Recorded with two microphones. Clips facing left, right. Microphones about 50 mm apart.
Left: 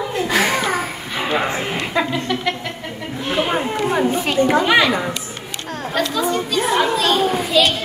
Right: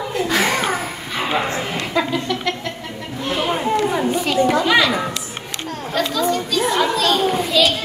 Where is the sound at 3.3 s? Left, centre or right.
Left.